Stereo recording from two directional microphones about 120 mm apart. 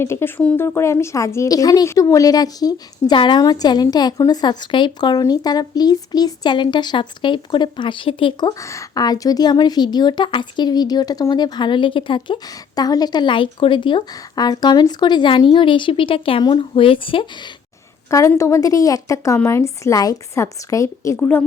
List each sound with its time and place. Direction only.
0.0 s a woman's voice: 20° left (ahead or behind); by 8.6 s 35° left (ahead or behind)
8.6 s a woman's voice: 25° left (ahead or behind); by 17.5 s 45° left (ahead or behind)
18.1 s a woman's voice: 25° left (ahead or behind)
21.2 s a woman's voice: 15° left (ahead or behind)